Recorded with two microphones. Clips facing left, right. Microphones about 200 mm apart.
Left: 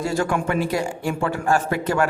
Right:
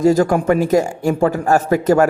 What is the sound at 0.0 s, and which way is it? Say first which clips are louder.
A man's voice: right 9 dB; 40° right (ahead or behind).